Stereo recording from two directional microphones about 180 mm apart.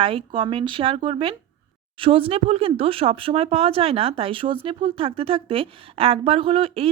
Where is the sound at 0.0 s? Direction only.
30° right (ahead or behind).